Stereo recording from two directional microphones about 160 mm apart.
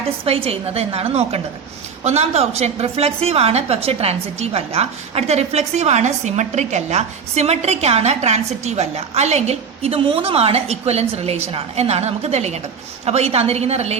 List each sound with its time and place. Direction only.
0.3 s a woman's voice: 40° right (ahead or behind)